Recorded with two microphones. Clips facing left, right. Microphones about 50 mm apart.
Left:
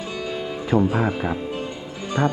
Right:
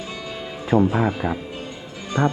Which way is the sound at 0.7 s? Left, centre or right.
Centre.